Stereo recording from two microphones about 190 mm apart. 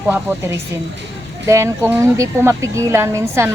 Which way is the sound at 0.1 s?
10° right (ahead or behind).